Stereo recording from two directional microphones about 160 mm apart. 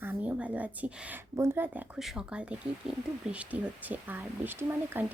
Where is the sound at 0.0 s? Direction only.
10° right (ahead or behind).